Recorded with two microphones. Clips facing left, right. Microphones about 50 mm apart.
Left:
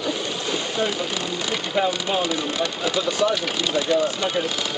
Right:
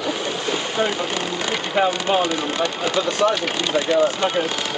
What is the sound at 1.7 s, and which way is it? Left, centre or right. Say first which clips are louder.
Speech: right 4 dB; right.